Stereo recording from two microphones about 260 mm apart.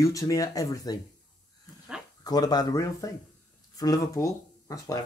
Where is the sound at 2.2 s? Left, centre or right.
Centre.